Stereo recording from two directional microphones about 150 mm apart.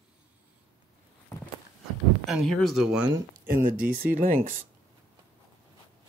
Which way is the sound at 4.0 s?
70° right (ahead or behind).